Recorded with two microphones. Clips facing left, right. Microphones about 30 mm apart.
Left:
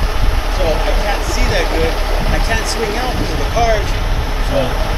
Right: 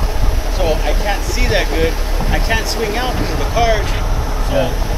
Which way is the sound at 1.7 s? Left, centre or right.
Centre.